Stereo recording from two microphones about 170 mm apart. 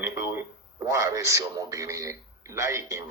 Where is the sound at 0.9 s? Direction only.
20° right (ahead or behind).